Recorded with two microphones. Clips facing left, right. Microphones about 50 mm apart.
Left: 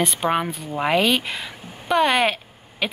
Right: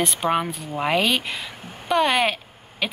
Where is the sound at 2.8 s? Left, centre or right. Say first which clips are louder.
Left 1 dB; centre.